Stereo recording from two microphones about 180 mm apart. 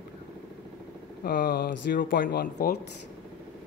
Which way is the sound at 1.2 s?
60° left (ahead or behind).